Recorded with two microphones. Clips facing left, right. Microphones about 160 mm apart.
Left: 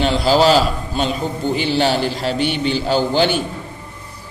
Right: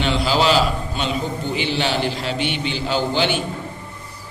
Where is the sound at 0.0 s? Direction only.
40° left (ahead or behind).